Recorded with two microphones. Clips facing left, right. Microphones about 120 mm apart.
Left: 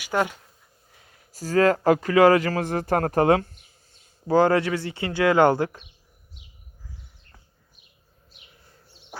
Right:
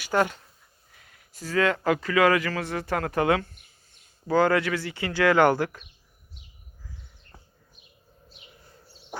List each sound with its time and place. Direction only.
0.0 s speech: 10° left (ahead or behind)
0.9 s speech: 25° left (ahead or behind)